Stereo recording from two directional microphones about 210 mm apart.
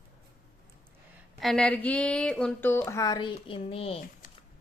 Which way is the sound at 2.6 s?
10° left (ahead or behind).